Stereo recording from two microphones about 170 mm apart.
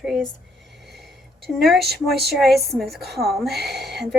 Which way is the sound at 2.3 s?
Centre (ahead or behind).